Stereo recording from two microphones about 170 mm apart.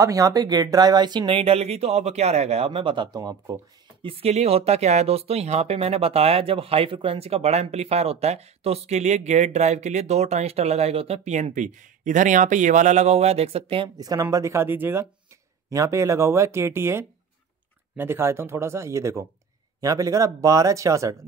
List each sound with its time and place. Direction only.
0.0 s speech: 20° right (ahead or behind)
4.0 s speech: 35° right (ahead or behind)
13.9 s speech: 20° right (ahead or behind)